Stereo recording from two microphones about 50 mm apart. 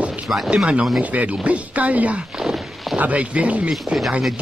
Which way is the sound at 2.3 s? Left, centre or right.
Centre.